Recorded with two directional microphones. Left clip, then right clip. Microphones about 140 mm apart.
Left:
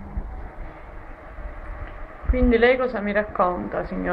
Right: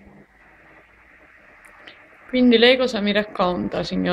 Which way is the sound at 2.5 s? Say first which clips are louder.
Right 2 dB; 50° right (ahead or behind).